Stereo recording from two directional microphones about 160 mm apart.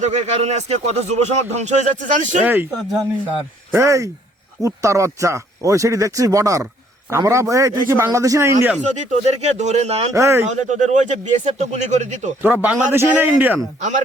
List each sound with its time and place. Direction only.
0.0 s speech: 45° right (ahead or behind)
2.4 s a man's voice: 10° right (ahead or behind)
3.7 s speech: 20° right (ahead or behind)
8.9 s speech: 45° right (ahead or behind)
10.2 s a man's voice: 15° right (ahead or behind)
10.5 s speech: 50° right (ahead or behind)
12.4 s a man's voice: 10° right (ahead or behind)